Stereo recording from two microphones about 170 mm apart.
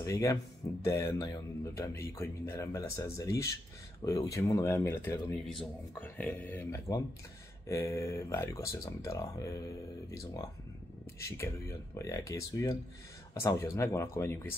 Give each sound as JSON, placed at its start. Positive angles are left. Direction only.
{"t": 0.0, "sound": "a man's voice", "side_deg": 20}